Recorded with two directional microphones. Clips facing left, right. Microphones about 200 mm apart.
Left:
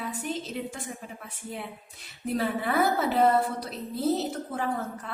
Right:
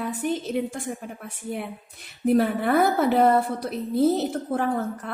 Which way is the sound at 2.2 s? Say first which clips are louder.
Right 8 dB; 55° right (ahead or behind).